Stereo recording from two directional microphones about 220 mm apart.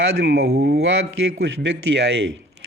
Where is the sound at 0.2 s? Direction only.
45° right (ahead or behind).